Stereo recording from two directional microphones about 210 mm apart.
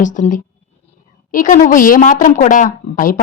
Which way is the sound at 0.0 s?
35° left (ahead or behind).